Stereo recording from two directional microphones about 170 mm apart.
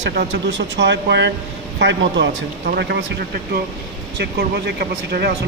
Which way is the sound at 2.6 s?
70° right (ahead or behind).